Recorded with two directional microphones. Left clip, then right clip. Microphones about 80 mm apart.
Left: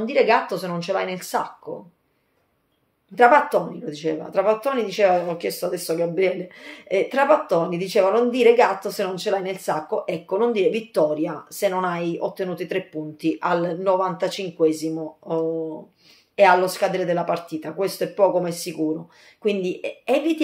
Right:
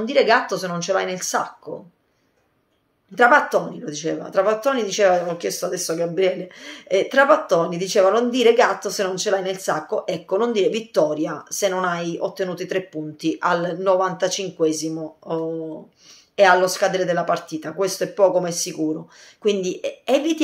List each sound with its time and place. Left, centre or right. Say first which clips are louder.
0.0 s speech: right 1 dB; right
3.2 s speech: even; right